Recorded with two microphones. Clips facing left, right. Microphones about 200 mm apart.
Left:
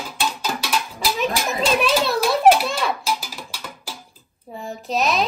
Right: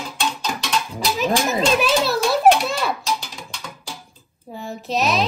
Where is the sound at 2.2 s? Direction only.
5° left (ahead or behind).